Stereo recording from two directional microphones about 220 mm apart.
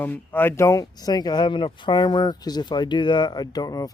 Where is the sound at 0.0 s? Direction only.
10° left (ahead or behind).